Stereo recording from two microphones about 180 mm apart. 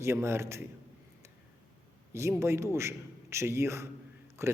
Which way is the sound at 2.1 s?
15° right (ahead or behind).